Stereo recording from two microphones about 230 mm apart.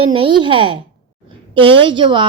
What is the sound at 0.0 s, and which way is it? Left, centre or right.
A woman's voice, right.